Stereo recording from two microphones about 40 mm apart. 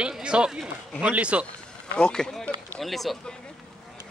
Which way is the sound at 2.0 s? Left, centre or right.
Left.